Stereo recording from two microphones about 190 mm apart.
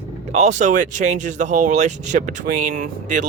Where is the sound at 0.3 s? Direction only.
35° right (ahead or behind).